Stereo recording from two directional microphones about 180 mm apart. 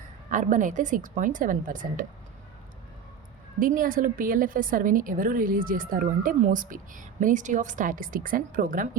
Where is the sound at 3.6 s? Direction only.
50° right (ahead or behind).